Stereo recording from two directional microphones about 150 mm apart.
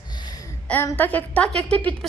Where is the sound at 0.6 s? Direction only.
15° left (ahead or behind).